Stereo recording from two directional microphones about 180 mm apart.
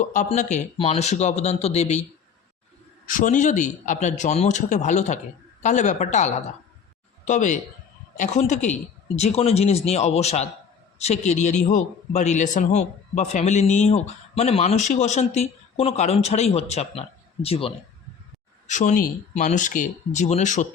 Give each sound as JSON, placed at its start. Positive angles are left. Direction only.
{"t": 0.0, "sound": "a man's voice", "side_deg": 45}
{"t": 3.1, "sound": "a man's voice", "side_deg": 45}
{"t": 18.7, "sound": "speech", "side_deg": 45}